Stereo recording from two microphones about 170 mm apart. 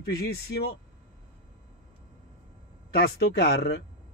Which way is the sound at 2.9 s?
70° left (ahead or behind).